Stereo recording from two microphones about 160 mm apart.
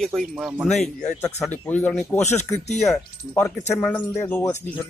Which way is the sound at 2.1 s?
45° left (ahead or behind).